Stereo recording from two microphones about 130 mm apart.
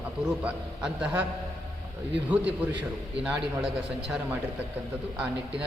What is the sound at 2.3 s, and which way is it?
A man's voice, 10° right (ahead or behind).